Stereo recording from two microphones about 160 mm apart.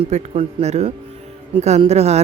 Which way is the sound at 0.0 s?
40° right (ahead or behind).